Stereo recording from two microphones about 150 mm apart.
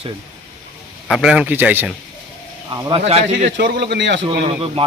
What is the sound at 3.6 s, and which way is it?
Speech, 90° right.